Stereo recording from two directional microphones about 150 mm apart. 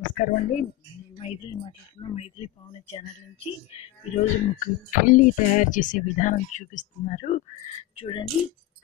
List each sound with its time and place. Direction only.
0.1 s speech: 65° left (ahead or behind)
1.1 s speech: 35° left (ahead or behind)
3.7 s music: 45° left (ahead or behind); by 6.3 s 60° left (ahead or behind)
6.3 s speech: 55° left (ahead or behind)
7.9 s speech: 35° left (ahead or behind)